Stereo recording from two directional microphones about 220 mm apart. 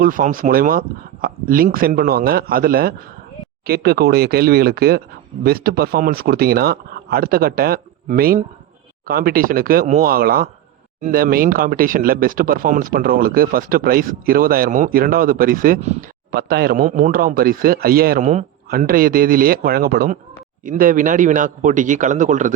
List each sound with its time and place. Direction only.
0.0 s speech: 40° right (ahead or behind)